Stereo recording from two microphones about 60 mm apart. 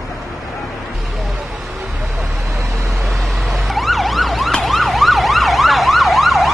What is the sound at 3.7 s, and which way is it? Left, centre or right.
Emergency vehicle, centre.